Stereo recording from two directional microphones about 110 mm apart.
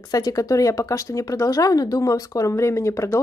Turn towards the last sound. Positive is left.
turn(degrees=25)  # may be behind; listen again after turning